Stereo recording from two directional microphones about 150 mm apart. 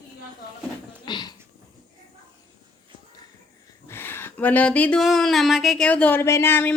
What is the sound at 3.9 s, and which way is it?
Speech, 15° left (ahead or behind).